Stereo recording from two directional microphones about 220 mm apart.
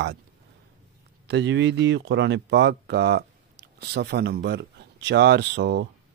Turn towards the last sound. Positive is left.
turn(degrees=-50)  # may be behind; listen again after turning